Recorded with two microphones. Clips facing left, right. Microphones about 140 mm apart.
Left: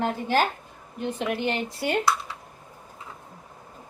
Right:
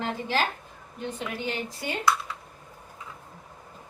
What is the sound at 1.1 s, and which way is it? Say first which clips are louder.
Speech: left 6 dB; 65° left (ahead or behind).